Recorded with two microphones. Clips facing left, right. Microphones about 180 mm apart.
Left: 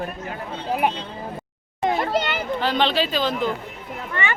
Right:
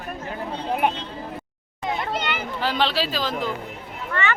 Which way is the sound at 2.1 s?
45° left (ahead or behind).